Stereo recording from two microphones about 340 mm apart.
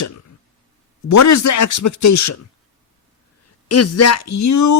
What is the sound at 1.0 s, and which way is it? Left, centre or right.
Speech, left.